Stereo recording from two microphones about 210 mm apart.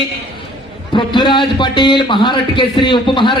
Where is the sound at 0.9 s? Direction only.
20° left (ahead or behind).